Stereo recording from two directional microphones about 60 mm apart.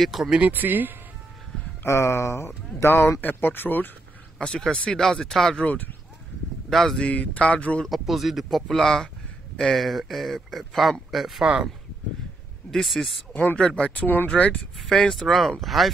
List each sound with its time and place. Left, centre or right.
0.0 s speech: centre
0.5 s speech: right
1.9 s speech: left
3.2 s speech: left
4.4 s speech: centre
6.7 s speech: centre
7.0 s speech: left
7.8 s speech: centre
12.7 s speech: centre
13.3 s speech: left
14.0 s speech: left
14.3 s speech: centre
14.8 s speech: centre